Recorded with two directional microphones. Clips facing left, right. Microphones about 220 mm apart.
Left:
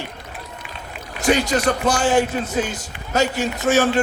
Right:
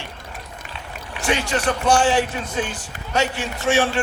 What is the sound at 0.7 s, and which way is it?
A man's voice, 40° left (ahead or behind).